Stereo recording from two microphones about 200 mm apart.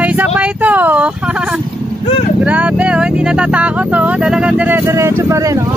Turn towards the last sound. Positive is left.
turn(degrees=-15)  # may be behind; listen again after turning